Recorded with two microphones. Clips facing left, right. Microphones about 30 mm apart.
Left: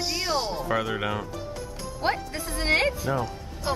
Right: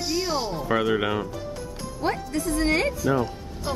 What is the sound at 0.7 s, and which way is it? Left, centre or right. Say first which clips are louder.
Speech: right 8 dB; centre.